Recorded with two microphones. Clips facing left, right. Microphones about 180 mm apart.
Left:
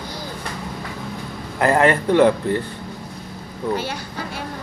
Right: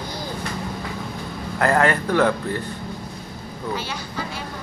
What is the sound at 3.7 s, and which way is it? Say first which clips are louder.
Music: left 2 dB; 55° left (ahead or behind).